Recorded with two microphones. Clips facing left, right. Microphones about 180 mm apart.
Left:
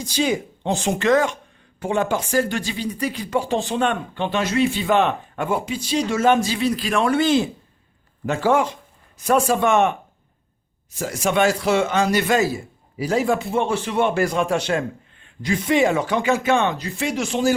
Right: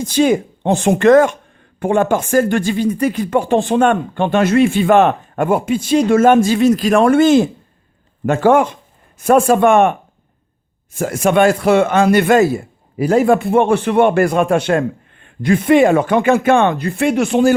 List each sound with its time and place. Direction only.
0.0 s speech: 55° right (ahead or behind)
10.9 s speech: 55° right (ahead or behind)